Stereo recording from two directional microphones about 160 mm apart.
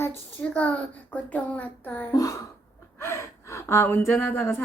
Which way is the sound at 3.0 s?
20° left (ahead or behind).